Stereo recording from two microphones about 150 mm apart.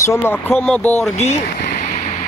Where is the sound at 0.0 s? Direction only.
15° left (ahead or behind).